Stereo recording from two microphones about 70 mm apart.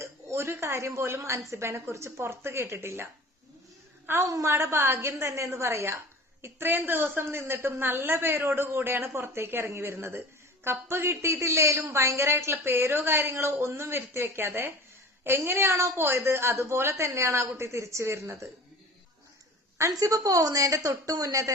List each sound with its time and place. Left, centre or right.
0.0 s a sound: right
1.5 s a woman's voice: right
19.9 s a woman's voice: right